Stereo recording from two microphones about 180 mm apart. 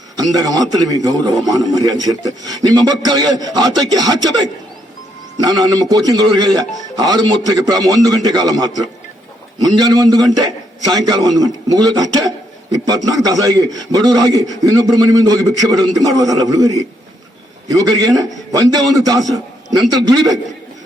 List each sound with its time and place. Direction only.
0.2 s a man's voice: 20° right (ahead or behind)
5.4 s a man's voice: 20° right (ahead or behind)